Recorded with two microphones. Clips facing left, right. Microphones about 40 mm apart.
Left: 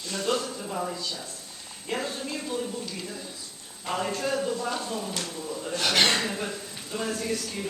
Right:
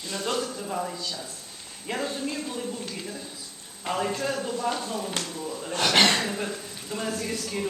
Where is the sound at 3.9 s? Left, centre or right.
Centre.